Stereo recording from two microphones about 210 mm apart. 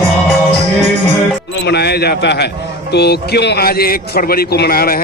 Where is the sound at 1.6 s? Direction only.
50° left (ahead or behind).